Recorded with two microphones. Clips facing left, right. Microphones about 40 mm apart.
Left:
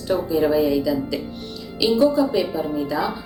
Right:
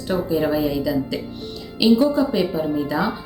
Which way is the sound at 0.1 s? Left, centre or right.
Centre.